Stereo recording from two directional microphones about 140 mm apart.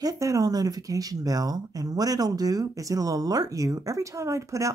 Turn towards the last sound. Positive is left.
turn(degrees=-20)  # may be behind; listen again after turning